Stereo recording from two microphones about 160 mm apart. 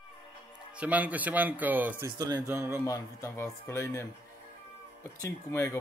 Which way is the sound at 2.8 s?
15° left (ahead or behind).